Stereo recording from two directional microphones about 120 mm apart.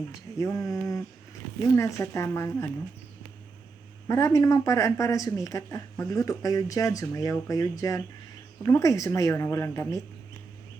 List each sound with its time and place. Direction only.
0.1 s speech: 25° left (ahead or behind)
4.1 s speech: 30° left (ahead or behind)